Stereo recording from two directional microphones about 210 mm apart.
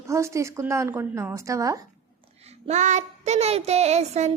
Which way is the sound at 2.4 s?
30° right (ahead or behind).